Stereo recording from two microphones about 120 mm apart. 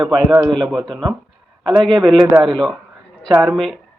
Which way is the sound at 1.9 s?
30° right (ahead or behind).